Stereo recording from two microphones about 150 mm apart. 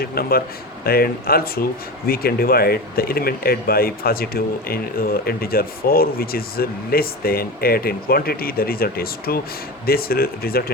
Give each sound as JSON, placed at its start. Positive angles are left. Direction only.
{"t": 0.0, "sound": "speech", "side_deg": 90}